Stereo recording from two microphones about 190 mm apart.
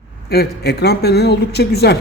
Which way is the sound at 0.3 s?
60° left (ahead or behind).